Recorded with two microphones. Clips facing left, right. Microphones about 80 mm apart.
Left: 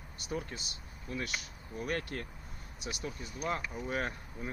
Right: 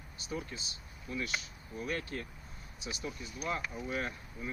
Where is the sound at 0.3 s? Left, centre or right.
Left.